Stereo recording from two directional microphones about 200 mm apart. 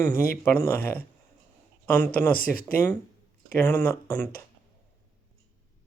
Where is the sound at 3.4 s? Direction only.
10° left (ahead or behind).